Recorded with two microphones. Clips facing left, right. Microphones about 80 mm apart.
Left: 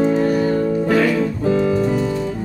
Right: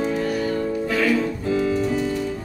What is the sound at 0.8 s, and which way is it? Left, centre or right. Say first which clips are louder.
Music: left 2 dB; left.